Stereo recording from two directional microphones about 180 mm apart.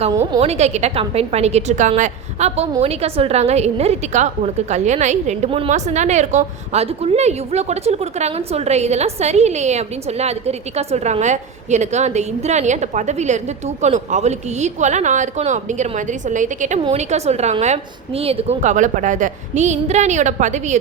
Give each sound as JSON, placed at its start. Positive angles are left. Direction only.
{"t": 0.1, "sound": "a woman's voice", "side_deg": -20}
{"t": 0.4, "sound": "a woman's voice", "side_deg": -35}